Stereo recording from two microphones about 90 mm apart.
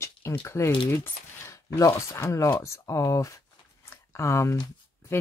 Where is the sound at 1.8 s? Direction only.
35° left (ahead or behind).